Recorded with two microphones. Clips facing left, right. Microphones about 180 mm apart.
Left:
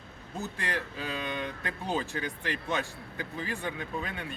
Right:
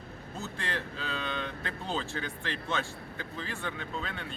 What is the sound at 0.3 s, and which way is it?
Speech, 15° left (ahead or behind).